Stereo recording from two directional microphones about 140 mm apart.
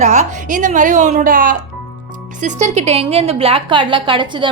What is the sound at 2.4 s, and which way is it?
A woman's voice, 50° right (ahead or behind).